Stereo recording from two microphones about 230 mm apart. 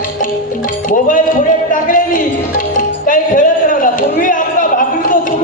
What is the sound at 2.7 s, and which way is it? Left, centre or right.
Music, left.